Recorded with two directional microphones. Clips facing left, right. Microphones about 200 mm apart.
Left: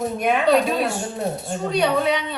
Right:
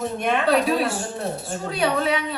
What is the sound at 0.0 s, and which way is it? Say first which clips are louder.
A woman's voice: left 2 dB; 5° left (ahead or behind).